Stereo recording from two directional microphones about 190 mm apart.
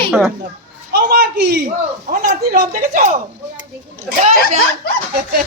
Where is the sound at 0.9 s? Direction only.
60° right (ahead or behind).